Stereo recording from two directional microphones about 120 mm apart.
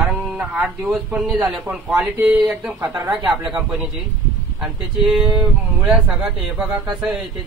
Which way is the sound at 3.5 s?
5° right (ahead or behind).